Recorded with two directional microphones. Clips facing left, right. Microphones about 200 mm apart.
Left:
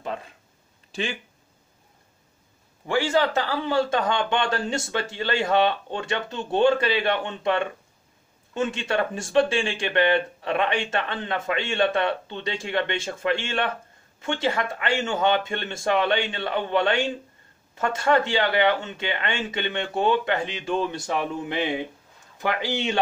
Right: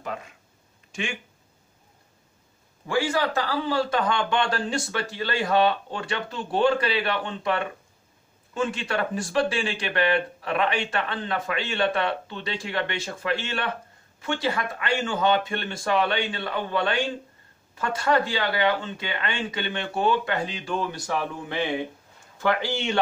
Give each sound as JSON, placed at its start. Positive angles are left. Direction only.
{"t": 0.0, "sound": "speech", "side_deg": 30}
{"t": 2.9, "sound": "speech", "side_deg": 25}